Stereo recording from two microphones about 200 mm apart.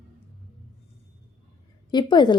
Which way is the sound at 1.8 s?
20° left (ahead or behind).